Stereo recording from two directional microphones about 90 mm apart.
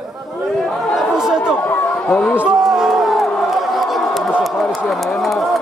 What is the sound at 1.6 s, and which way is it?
Run, 20° left (ahead or behind).